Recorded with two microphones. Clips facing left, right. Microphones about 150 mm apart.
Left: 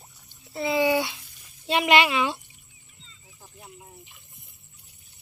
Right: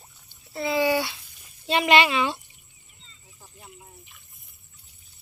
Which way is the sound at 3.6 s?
15° left (ahead or behind).